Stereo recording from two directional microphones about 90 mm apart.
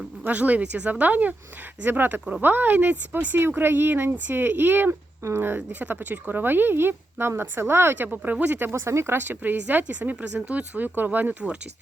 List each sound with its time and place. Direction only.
0.3 s speech: 15° right (ahead or behind)
8.7 s speech: 30° right (ahead or behind)